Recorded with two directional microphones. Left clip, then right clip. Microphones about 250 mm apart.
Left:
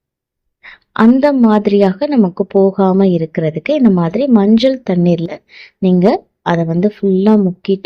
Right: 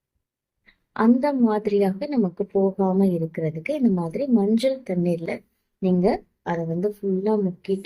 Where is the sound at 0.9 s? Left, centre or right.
Left.